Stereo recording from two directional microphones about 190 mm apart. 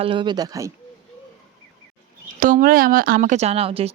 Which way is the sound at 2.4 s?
45° right (ahead or behind).